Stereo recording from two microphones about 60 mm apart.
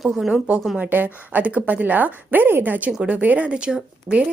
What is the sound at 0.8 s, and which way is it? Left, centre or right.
Speech, right.